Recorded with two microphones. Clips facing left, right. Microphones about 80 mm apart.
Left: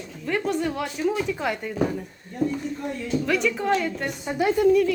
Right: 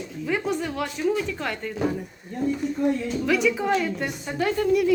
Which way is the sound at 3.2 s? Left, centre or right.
Centre.